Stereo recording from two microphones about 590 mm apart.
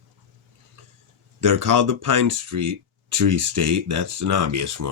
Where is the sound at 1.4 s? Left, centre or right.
Right.